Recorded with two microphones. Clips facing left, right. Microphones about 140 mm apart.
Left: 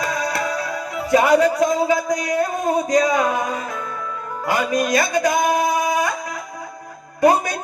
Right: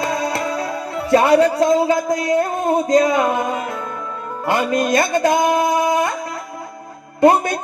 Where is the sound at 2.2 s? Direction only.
25° right (ahead or behind).